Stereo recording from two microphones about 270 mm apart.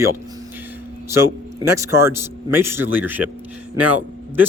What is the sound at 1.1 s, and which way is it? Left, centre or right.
Speech, centre.